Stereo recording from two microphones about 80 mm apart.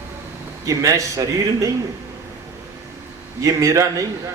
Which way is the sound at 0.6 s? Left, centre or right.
Right.